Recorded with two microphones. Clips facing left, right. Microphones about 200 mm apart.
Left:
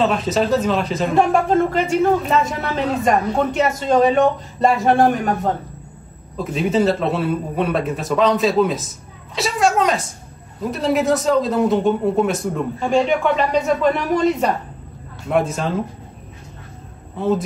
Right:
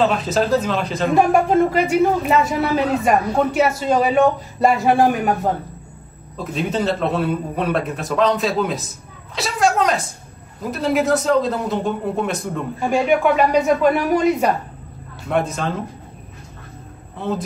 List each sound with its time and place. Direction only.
0.0 s a man's voice: centre (ahead or behind)
15.2 s a man's voice: centre (ahead or behind)